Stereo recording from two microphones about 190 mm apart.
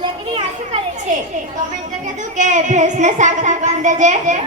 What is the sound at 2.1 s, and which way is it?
Speech, 40° right (ahead or behind).